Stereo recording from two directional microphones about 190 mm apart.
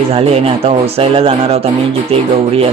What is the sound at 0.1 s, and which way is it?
Speech, 30° right (ahead or behind).